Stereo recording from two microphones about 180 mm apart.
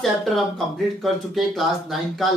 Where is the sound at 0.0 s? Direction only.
Centre (ahead or behind).